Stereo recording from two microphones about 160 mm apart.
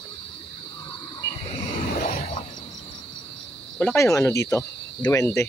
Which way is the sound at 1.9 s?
55° left (ahead or behind).